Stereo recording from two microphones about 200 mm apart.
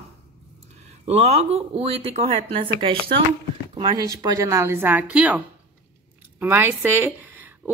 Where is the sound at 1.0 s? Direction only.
30° right (ahead or behind); by 5.4 s 5° right (ahead or behind).